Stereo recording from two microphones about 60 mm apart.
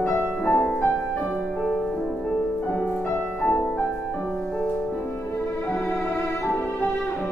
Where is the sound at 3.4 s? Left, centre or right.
Left.